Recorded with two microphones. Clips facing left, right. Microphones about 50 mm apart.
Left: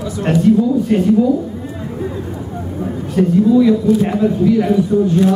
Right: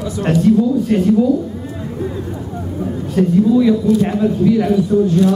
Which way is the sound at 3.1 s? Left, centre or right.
Centre.